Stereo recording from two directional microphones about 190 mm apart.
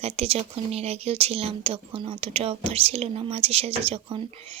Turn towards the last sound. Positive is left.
turn(degrees=-30)  # may be behind; listen again after turning